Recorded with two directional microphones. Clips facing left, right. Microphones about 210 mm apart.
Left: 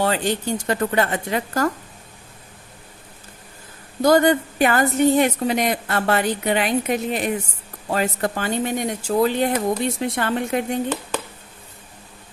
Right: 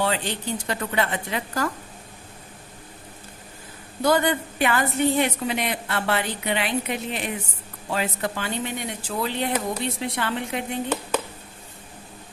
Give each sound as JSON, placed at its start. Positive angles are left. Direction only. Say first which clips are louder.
{"t": 0.0, "sound": "a woman's voice", "louder": "left 4 dB", "side_deg": 45}
{"t": 4.0, "sound": "a woman's voice", "louder": "left 6 dB", "side_deg": 45}